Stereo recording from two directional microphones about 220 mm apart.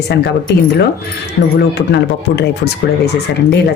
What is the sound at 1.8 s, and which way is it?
Speech, 50° left (ahead or behind).